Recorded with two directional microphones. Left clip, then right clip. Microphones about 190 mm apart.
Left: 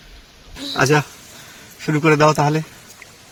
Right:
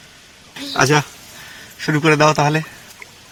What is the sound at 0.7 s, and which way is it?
Speech, centre (ahead or behind).